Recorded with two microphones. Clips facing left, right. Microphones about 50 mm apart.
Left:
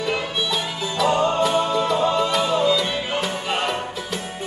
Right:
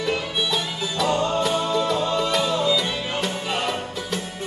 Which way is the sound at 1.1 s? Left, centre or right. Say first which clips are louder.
Left 3 dB; left.